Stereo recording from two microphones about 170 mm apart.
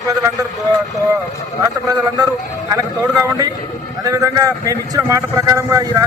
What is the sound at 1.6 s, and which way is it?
Speech, 20° right (ahead or behind).